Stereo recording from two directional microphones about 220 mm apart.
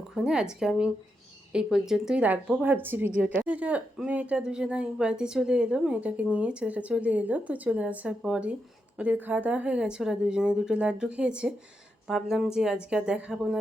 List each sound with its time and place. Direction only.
0.1 s a woman's voice: centre (ahead or behind)